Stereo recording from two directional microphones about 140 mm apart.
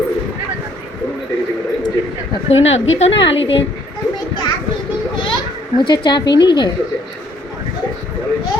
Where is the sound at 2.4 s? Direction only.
50° left (ahead or behind).